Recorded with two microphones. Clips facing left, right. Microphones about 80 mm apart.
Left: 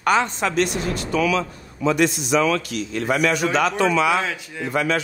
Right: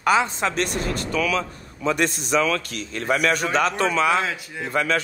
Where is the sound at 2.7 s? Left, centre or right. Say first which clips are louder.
Left 5 dB; right.